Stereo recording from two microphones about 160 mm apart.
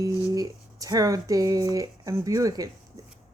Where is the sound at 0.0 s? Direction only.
25° right (ahead or behind).